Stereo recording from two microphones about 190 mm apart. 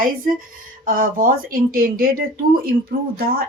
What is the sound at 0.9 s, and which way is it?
Speech, 45° right (ahead or behind).